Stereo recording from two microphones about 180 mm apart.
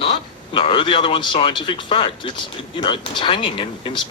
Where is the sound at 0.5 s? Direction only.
30° left (ahead or behind).